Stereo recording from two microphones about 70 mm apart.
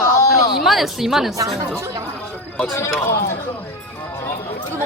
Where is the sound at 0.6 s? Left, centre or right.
Centre.